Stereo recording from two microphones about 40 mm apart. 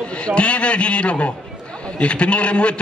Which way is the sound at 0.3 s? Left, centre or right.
Left.